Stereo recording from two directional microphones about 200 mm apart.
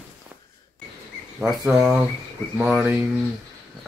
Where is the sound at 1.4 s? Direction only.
Centre (ahead or behind).